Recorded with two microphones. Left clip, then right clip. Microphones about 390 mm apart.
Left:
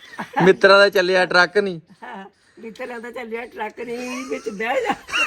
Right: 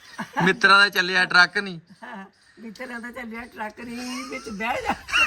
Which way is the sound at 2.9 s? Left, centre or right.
Left.